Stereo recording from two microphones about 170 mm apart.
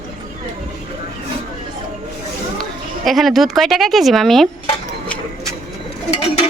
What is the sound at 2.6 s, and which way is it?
Speech, centre (ahead or behind).